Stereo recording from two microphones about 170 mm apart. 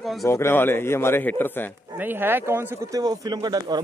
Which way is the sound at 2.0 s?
10° right (ahead or behind).